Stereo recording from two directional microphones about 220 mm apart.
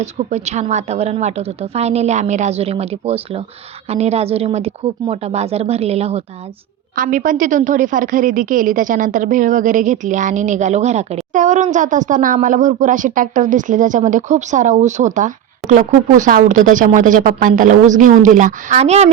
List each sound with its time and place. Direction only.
0.0 s a woman's voice: 30° right (ahead or behind)
6.9 s a woman's voice: 40° right (ahead or behind)